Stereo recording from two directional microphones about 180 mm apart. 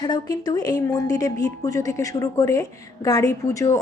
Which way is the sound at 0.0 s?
20° left (ahead or behind).